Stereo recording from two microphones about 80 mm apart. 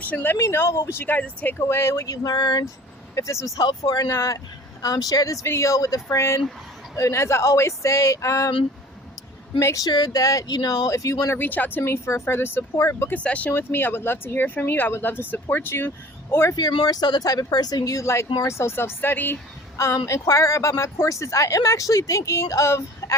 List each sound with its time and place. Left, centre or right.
0.0 s speech: left
0.3 s speech: left
1.6 s speech: left
2.2 s speech: left
3.2 s speech: left
9.6 s speech: left
9.9 s speech: left
11.4 s speech: left
12.7 s speech: left
13.1 s speech: centre; by 16.6 s left
16.6 s speech: left
19.7 s speech: left